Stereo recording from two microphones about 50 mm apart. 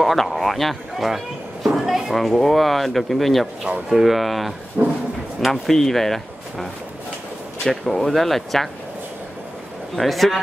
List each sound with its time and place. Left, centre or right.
0.0 s speech: centre
4.8 s speech: right
5.4 s speech: centre
9.9 s speech: centre